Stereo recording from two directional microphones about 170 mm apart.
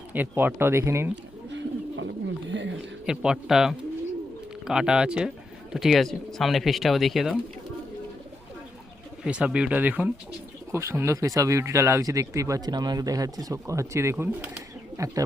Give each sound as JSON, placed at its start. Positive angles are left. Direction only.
{"t": 0.1, "sound": "speech", "side_deg": -10}
{"t": 1.5, "sound": "wild animals", "side_deg": -90}
{"t": 3.1, "sound": "speech", "side_deg": -5}
{"t": 9.2, "sound": "speech", "side_deg": -5}